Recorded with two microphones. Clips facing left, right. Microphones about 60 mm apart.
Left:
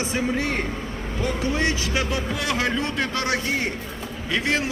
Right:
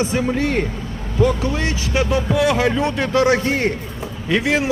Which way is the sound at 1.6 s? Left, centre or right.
Right.